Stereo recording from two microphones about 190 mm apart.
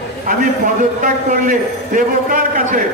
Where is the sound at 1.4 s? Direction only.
45° right (ahead or behind).